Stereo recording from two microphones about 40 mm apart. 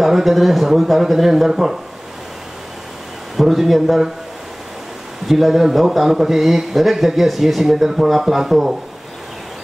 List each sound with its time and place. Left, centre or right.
0.0 s speech: centre
3.3 s speech: centre
5.2 s speech: centre